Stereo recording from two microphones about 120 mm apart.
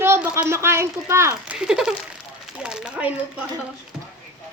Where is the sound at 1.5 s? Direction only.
5° right (ahead or behind).